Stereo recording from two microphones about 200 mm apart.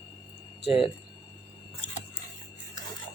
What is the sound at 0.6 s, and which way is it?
Speech, 25° left (ahead or behind).